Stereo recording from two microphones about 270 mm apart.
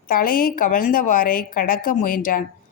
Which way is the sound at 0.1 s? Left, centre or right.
Left.